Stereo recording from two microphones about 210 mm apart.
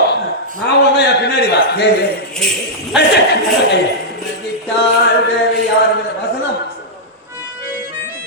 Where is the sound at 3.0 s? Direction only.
50° left (ahead or behind).